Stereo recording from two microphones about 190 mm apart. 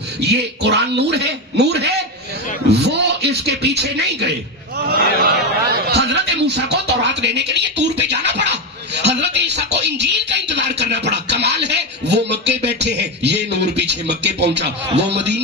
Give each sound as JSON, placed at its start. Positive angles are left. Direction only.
{"t": 0.2, "sound": "a man's voice", "side_deg": -60}
{"t": 5.2, "sound": "a sound", "side_deg": -60}
{"t": 10.5, "sound": "music", "side_deg": -65}